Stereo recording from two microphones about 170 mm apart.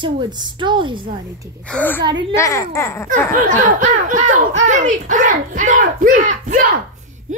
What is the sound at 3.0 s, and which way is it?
A child's voice, 50° right (ahead or behind).